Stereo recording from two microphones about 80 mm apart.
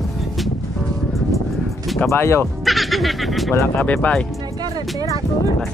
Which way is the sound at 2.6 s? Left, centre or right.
Centre.